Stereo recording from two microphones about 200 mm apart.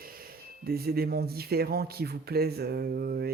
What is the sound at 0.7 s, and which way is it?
Speech, 50° right (ahead or behind).